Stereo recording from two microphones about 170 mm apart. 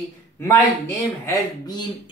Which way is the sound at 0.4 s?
15° left (ahead or behind).